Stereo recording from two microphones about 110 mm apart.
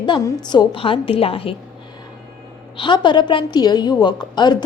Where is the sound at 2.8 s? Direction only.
45° left (ahead or behind).